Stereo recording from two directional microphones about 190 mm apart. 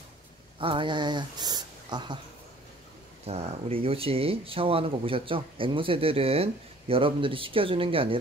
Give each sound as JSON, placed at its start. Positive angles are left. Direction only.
{"t": 0.6, "sound": "speech", "side_deg": -25}
{"t": 3.3, "sound": "speech", "side_deg": -30}